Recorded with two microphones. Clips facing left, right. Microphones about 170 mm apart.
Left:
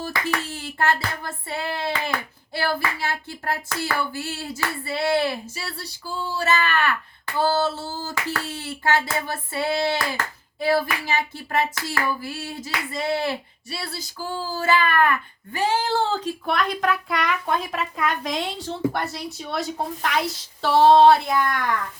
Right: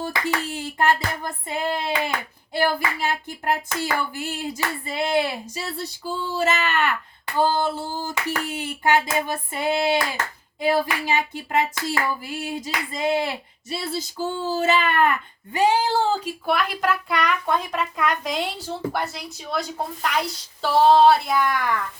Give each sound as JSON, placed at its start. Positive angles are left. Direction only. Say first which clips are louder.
{"t": 0.0, "sound": "a sound", "louder": "right 1 dB", "side_deg": -20}
{"t": 10.6, "sound": "hands", "louder": "even", "side_deg": -20}
{"t": 15.5, "sound": "speech", "louder": "right 3 dB", "side_deg": -15}